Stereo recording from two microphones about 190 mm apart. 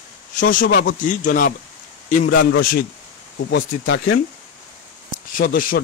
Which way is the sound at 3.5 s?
85° left.